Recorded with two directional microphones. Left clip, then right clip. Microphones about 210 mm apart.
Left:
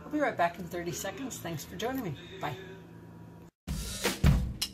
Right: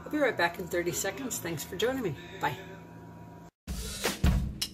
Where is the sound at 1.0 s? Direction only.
10° right (ahead or behind).